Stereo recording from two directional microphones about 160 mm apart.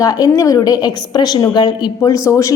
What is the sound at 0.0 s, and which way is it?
A woman's voice, 20° left (ahead or behind).